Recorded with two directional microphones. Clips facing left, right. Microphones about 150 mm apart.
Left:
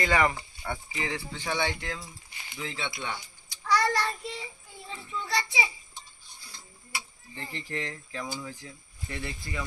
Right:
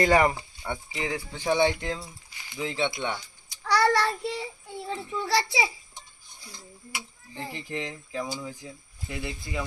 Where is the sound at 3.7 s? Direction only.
70° right (ahead or behind).